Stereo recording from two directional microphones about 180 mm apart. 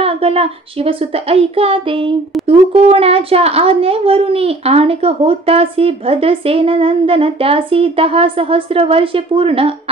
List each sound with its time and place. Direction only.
0.0 s speech: 35° right (ahead or behind)